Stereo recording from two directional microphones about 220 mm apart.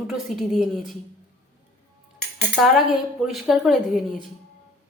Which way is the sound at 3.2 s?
Centre (ahead or behind).